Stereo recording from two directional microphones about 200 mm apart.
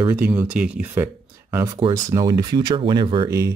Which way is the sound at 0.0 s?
10° right (ahead or behind).